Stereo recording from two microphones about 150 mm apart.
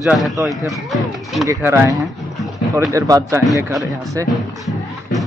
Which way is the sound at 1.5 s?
20° right (ahead or behind).